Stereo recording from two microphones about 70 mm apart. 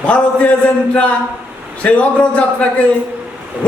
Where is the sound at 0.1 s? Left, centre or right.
Centre.